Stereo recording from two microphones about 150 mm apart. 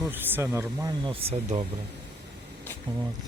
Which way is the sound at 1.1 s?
40° right (ahead or behind).